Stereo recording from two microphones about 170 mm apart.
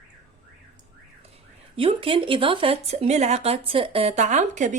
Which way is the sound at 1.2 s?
35° right (ahead or behind).